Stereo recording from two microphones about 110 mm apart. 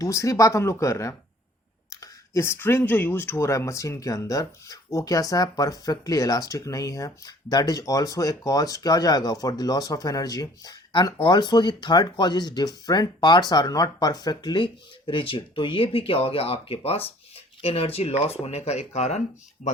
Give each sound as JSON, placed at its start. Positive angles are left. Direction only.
{"t": 0.0, "sound": "speech", "side_deg": 30}